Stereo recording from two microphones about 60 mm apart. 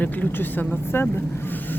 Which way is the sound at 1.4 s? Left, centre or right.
Left.